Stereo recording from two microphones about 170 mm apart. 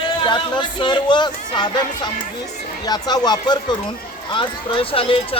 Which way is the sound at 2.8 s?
25° left (ahead or behind).